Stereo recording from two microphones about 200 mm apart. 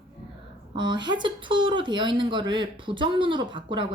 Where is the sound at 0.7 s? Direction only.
25° right (ahead or behind).